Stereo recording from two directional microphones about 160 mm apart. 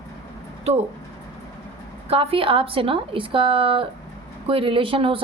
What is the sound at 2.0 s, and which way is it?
A woman's voice, 35° right (ahead or behind).